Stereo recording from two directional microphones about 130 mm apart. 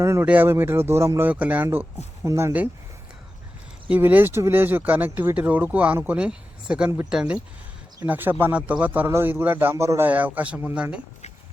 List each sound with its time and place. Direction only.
0.0 s speech: 20° right (ahead or behind)
3.8 s speech: 10° right (ahead or behind)